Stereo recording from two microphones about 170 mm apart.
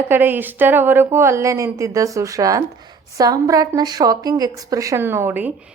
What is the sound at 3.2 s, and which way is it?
A woman's voice, 20° right (ahead or behind).